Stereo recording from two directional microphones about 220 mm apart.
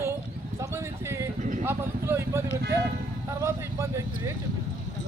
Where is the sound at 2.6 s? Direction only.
50° right (ahead or behind).